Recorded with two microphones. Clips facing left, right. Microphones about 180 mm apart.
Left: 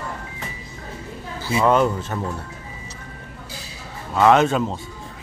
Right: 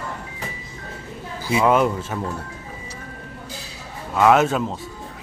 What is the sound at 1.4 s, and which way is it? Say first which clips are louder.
Speech: even; 10° right (ahead or behind).